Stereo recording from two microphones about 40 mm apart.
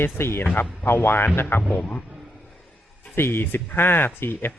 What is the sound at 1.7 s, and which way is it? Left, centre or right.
Speech, left.